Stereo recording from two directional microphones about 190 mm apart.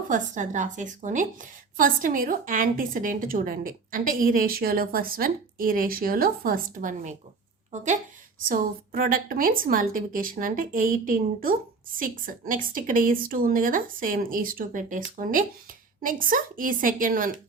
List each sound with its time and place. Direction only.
0.1 s a woman's voice: 40° right (ahead or behind)